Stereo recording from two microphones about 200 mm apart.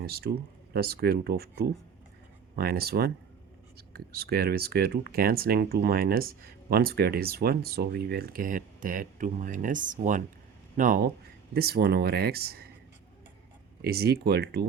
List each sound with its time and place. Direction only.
0.0 s speech: 50° right (ahead or behind)
13.8 s speech: 50° right (ahead or behind)